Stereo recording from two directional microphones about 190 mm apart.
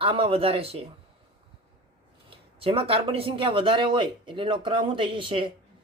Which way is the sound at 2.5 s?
30° right (ahead or behind).